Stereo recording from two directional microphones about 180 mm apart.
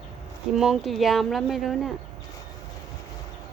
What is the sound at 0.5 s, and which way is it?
Speech, centre (ahead or behind).